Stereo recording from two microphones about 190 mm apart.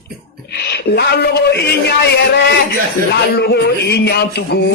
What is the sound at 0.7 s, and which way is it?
A man's voice, 60° left (ahead or behind).